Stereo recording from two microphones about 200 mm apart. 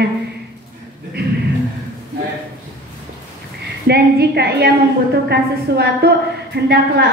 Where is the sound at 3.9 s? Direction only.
55° right (ahead or behind).